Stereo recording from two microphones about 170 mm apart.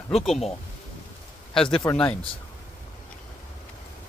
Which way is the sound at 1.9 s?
15° left (ahead or behind).